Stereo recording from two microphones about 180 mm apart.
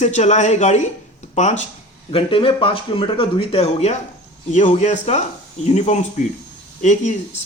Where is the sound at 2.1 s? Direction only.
30° left (ahead or behind).